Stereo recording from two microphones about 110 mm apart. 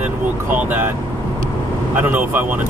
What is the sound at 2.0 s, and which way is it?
Speech, 15° right (ahead or behind).